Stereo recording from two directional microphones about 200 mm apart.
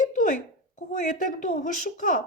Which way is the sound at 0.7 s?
40° left (ahead or behind).